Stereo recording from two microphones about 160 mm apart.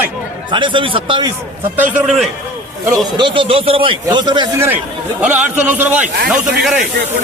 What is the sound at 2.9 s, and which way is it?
Speech, 30° right (ahead or behind).